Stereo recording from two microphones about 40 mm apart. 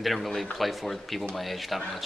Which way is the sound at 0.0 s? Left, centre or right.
Centre.